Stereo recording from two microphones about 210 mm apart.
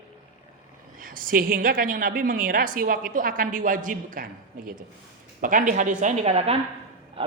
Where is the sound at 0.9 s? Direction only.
40° right (ahead or behind).